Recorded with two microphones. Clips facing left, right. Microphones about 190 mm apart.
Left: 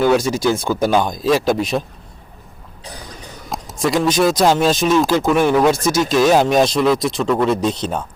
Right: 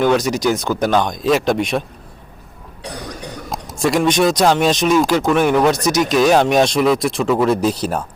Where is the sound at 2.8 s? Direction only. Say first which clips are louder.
Right 6 dB; 70° right (ahead or behind).